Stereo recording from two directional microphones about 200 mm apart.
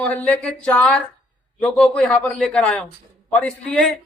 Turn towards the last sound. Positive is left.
turn(degrees=5)  # may be behind; listen again after turning